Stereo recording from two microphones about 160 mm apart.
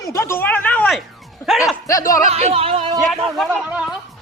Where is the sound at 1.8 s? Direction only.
20° left (ahead or behind).